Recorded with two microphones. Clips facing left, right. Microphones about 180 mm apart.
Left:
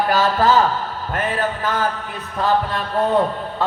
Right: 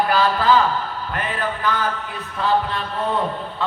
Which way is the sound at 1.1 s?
45° left (ahead or behind).